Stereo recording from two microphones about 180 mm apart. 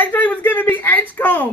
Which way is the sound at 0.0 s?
10° left (ahead or behind).